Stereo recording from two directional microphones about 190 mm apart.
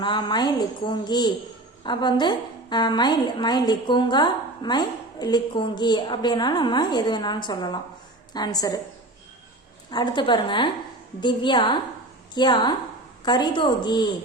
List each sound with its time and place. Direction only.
0.0 s a woman's voice: 25° left (ahead or behind)
9.9 s a woman's voice: 25° left (ahead or behind)